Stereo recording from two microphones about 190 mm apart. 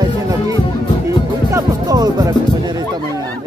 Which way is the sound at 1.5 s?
20° right (ahead or behind).